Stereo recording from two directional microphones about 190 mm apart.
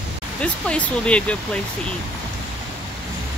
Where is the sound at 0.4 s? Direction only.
5° left (ahead or behind).